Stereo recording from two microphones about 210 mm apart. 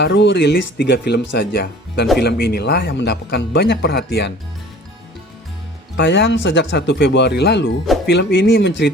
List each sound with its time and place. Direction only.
0.0 s speech: 60° left (ahead or behind)
6.0 s speech: 60° left (ahead or behind)